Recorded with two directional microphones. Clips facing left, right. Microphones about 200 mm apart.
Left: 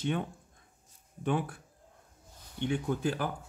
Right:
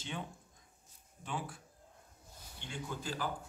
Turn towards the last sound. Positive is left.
turn(degrees=60)  # may be behind; listen again after turning